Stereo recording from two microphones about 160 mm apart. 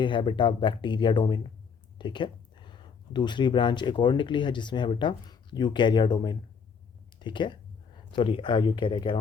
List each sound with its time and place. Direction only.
0.0 s speech: 30° left (ahead or behind)